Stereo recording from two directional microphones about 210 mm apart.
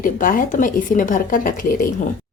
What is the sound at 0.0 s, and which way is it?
A woman's voice, 40° left (ahead or behind).